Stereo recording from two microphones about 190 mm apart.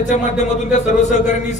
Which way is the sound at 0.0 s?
40° left (ahead or behind).